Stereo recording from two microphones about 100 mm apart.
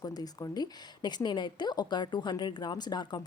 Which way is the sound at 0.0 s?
40° left (ahead or behind).